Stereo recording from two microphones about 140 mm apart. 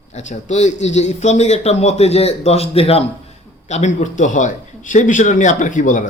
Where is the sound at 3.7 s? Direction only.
60° left (ahead or behind).